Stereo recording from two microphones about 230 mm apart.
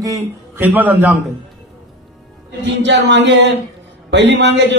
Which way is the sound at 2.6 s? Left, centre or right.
Right.